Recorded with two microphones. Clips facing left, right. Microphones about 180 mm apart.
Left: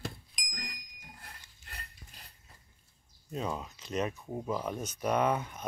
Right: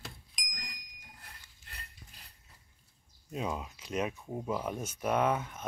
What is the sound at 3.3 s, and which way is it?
Speech, 5° right (ahead or behind).